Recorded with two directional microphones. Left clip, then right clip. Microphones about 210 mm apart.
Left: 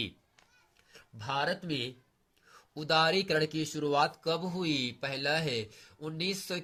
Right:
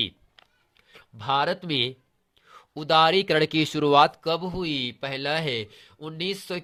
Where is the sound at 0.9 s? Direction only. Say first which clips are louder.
Right 9 dB; 35° right (ahead or behind).